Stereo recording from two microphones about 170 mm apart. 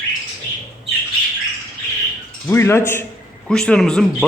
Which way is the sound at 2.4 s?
15° left (ahead or behind).